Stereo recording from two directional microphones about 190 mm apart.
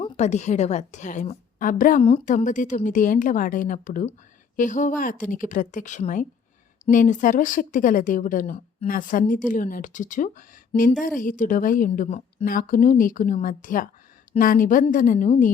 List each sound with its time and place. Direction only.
0.0 s a woman's voice: 35° left (ahead or behind)
12.0 s a woman's voice: 35° left (ahead or behind)
12.5 s a woman's voice: 45° left (ahead or behind)